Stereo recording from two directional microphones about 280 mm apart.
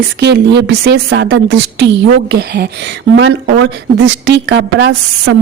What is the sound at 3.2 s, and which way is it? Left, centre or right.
Speech, right.